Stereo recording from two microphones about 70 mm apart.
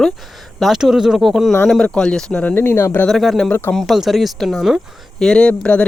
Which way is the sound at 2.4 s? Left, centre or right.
Left.